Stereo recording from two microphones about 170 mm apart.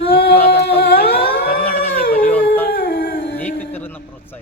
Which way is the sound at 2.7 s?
65° left (ahead or behind).